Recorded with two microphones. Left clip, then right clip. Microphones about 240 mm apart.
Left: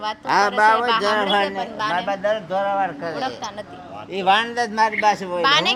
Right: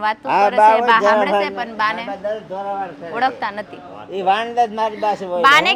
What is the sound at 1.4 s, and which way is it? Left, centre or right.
Speech, right.